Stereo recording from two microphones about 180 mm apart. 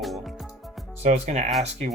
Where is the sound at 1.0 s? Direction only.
40° right (ahead or behind).